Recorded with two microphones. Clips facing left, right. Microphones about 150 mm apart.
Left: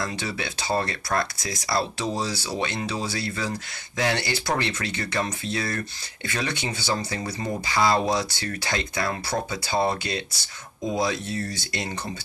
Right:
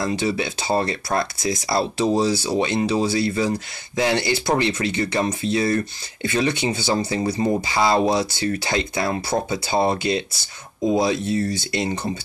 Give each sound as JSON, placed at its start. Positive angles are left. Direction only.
{"t": 0.0, "sound": "speech", "side_deg": -20}